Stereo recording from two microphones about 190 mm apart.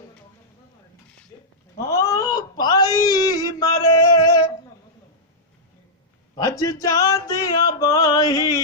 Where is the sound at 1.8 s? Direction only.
15° left (ahead or behind).